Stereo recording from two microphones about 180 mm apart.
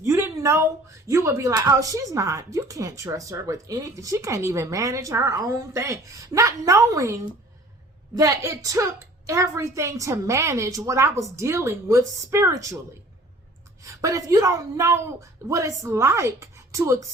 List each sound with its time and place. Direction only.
0.0 s speech: 15° right (ahead or behind)
13.8 s speech: 20° right (ahead or behind)